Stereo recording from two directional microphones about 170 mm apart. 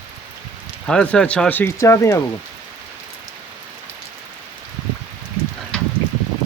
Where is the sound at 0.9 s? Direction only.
5° left (ahead or behind).